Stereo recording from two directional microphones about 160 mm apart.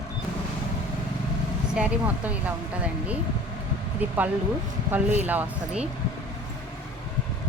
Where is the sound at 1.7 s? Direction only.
5° right (ahead or behind).